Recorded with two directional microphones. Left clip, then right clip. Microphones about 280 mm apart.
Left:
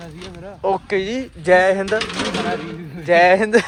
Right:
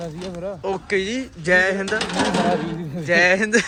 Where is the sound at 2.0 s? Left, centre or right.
Right.